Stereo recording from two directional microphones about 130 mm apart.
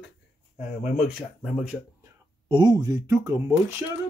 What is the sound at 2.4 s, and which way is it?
Speech, 35° right (ahead or behind).